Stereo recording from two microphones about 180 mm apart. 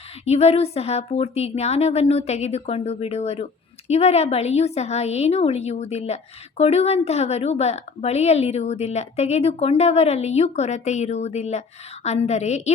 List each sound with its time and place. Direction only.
0.3 s a woman's voice: 35° left (ahead or behind)